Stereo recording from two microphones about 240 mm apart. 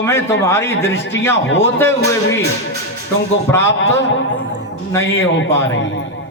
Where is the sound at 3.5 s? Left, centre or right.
Centre.